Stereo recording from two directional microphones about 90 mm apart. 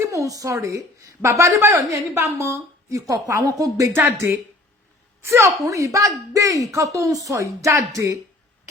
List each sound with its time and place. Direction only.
0.0 s a woman's voice: 35° right (ahead or behind)